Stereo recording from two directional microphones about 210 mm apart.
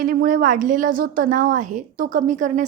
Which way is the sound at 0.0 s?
40° right (ahead or behind).